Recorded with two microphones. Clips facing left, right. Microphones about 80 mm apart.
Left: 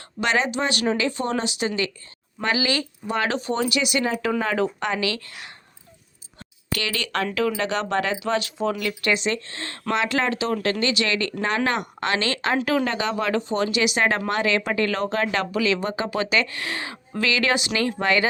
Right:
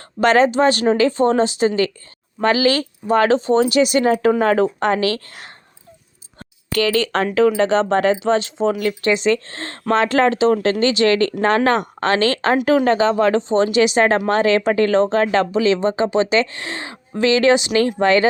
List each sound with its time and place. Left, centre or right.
0.2 s speech: right
6.7 s speech: right
8.8 s speech: right